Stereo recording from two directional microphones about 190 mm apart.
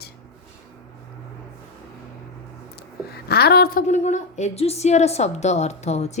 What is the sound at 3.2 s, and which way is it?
A woman's voice, 55° left (ahead or behind).